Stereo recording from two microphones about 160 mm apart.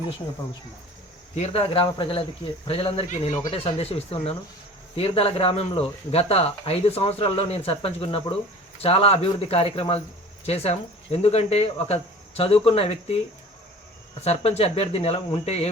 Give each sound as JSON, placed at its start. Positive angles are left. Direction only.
{"t": 1.4, "sound": "speech", "side_deg": 35}
{"t": 14.3, "sound": "speech", "side_deg": 40}